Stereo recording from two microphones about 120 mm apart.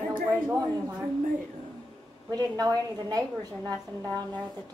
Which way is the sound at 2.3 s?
35° right (ahead or behind).